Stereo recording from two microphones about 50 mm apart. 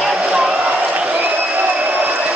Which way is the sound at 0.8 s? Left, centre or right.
Right.